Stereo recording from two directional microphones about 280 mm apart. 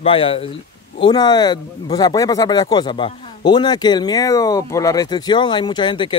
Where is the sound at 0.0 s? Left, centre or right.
Centre.